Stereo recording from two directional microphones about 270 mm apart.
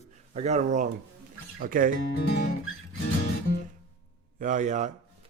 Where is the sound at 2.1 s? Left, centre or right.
Left.